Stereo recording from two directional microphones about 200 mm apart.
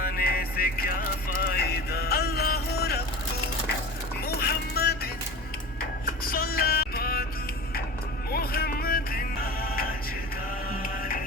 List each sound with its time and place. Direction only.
0.0 s music: 45° left (ahead or behind)
4.2 s music: 50° left (ahead or behind)
8.3 s music: 50° left (ahead or behind)